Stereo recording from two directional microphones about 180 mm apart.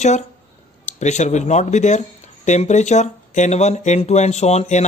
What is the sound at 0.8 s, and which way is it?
Speech, 40° left (ahead or behind).